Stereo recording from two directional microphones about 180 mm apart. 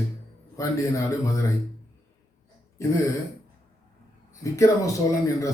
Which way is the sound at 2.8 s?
15° left (ahead or behind).